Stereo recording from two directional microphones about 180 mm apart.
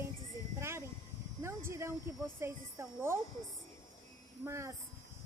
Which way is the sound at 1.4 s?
15° right (ahead or behind).